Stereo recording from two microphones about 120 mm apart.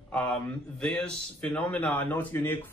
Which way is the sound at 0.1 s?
5° left (ahead or behind).